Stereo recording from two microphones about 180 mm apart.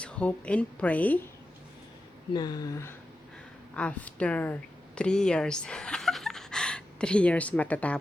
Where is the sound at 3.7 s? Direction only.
5° left (ahead or behind).